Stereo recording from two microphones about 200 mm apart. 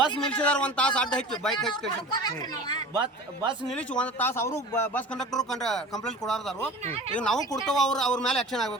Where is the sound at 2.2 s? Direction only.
20° left (ahead or behind).